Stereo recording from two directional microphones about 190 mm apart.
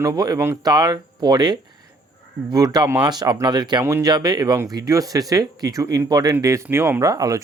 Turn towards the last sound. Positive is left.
turn(degrees=-20)  # may be behind; listen again after turning